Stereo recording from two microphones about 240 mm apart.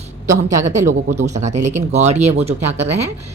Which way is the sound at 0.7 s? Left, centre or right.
Right.